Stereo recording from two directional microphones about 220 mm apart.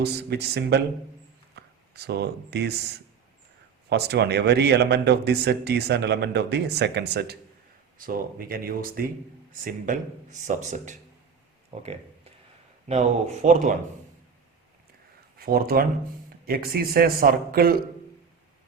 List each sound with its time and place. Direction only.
0.0 s a man's voice: 50° right (ahead or behind)
11.8 s a sound: 30° right (ahead or behind)
12.9 s speech: 30° right (ahead or behind)
15.4 s a man's voice: 45° right (ahead or behind)